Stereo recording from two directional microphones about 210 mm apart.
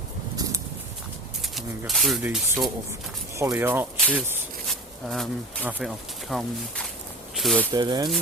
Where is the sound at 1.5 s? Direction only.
Centre (ahead or behind).